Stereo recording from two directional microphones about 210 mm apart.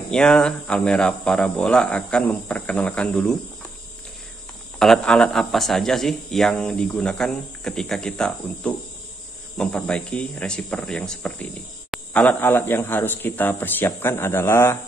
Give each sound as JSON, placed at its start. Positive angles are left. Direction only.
{"t": 0.1, "sound": "speech", "side_deg": 5}
{"t": 4.7, "sound": "speech", "side_deg": 5}